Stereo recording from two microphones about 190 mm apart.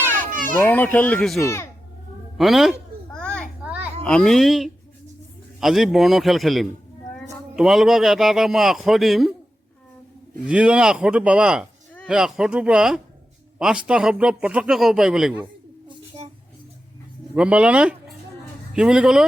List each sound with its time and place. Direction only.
0.3 s children playing: 45° right (ahead or behind)
0.6 s speech: 10° left (ahead or behind)
2.4 s a man's voice: centre (ahead or behind)
3.1 s children playing: 5° left (ahead or behind)
4.0 s a man's voice: 5° left (ahead or behind)
10.4 s a man's voice: 5° right (ahead or behind)
17.3 s a man's voice: 5° right (ahead or behind)